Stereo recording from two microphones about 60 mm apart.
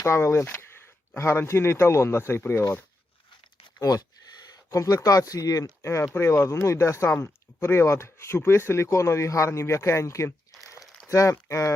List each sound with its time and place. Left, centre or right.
0.0 s speech: left
3.8 s speech: left
4.5 s a sound: left
5.0 s speech: left
5.8 s speech: left